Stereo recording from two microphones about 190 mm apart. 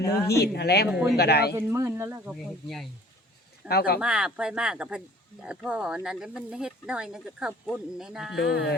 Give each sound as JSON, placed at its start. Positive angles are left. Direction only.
{"t": 0.0, "sound": "speech", "side_deg": 55}
{"t": 0.9, "sound": "speech", "side_deg": -5}
{"t": 1.1, "sound": "speech", "side_deg": 55}
{"t": 1.5, "sound": "speech", "side_deg": -15}
{"t": 3.7, "sound": "speech", "side_deg": 55}
{"t": 4.0, "sound": "speech", "side_deg": -5}
{"t": 8.4, "sound": "speech", "side_deg": 65}